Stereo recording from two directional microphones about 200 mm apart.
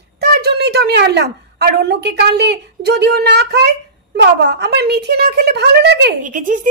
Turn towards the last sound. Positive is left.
turn(degrees=-40)  # may be behind; listen again after turning